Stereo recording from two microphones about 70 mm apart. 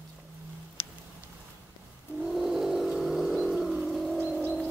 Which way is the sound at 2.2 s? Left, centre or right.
Centre.